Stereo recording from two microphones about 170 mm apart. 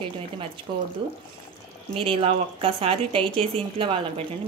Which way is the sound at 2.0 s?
30° right (ahead or behind).